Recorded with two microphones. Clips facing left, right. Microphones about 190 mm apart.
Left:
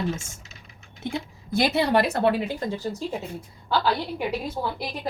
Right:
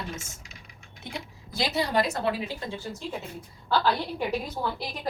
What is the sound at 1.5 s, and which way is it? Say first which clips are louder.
A woman's voice: left 6 dB; 60° left (ahead or behind).